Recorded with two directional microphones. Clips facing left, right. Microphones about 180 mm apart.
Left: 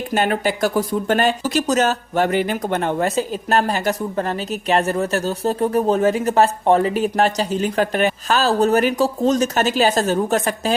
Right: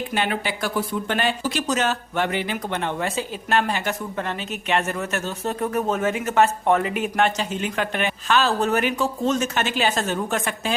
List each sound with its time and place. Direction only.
0.1 s speech: 45° left (ahead or behind)